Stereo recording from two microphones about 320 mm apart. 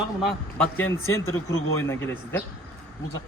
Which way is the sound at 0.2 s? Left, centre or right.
Centre.